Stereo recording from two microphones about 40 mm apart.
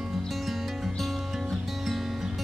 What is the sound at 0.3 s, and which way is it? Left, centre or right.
Music, centre.